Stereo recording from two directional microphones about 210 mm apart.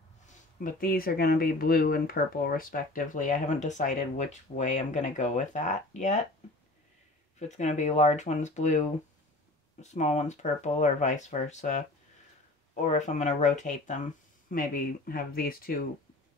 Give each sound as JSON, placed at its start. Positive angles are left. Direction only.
{"t": 0.3, "sound": "speech", "side_deg": 40}
{"t": 7.3, "sound": "speech", "side_deg": 35}